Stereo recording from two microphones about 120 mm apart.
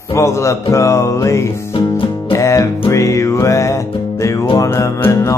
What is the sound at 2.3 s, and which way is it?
Music, 25° left (ahead or behind).